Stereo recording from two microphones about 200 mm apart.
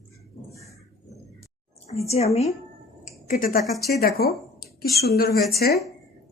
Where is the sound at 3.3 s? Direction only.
45° left (ahead or behind).